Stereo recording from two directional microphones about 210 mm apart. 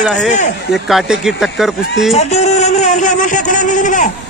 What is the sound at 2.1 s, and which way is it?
A man's voice, 30° left (ahead or behind).